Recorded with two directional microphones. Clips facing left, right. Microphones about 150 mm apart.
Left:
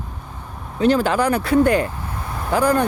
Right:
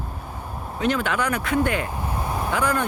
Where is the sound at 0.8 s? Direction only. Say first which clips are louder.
Left 7 dB; 35° left (ahead or behind).